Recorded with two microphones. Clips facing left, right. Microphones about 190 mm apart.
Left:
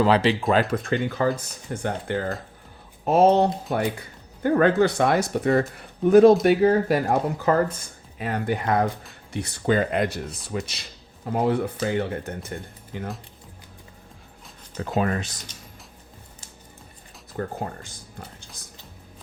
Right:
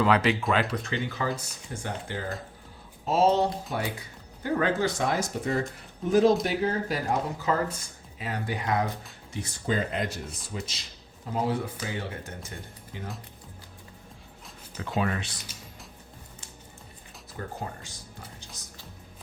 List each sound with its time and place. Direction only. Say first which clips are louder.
0.0 s speech: left 4 dB; 30° left (ahead or behind)
0.7 s speech: left 7 dB; 50° left (ahead or behind)
4.4 s speech: left 7 dB; 60° left (ahead or behind)
9.3 s speech: left 7 dB; 65° left (ahead or behind)
14.8 s speech: left 4 dB; 45° left (ahead or behind)
17.3 s speech: left 6 dB; 55° left (ahead or behind)